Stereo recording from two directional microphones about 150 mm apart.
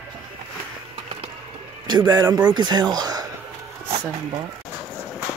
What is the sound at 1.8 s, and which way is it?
Speech, 30° right (ahead or behind).